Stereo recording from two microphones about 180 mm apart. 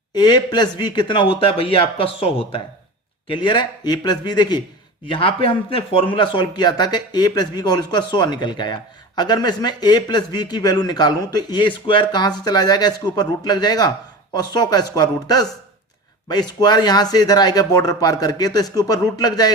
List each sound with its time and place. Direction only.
0.1 s a man's voice: 25° left (ahead or behind)